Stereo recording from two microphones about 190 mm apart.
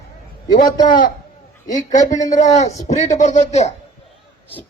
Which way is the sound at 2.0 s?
40° left (ahead or behind).